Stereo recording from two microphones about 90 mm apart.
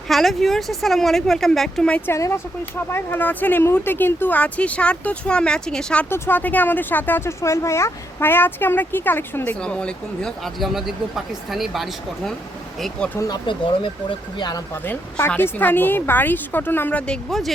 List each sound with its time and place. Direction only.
0.1 s speech: centre (ahead or behind)
2.0 s speech: 30° left (ahead or behind); by 6.1 s 10° left (ahead or behind)
6.1 s speech: 25° left (ahead or behind)
9.6 s speech: 10° left (ahead or behind)
13.5 s speech: 70° left (ahead or behind)
15.4 s speech: 20° left (ahead or behind)
17.1 s speech: centre (ahead or behind)